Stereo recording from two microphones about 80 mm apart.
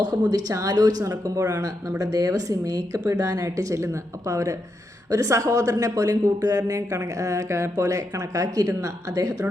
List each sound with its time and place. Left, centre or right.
0.0 s a woman's voice: right